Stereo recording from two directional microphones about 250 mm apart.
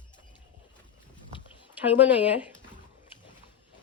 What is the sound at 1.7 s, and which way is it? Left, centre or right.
Speech, centre.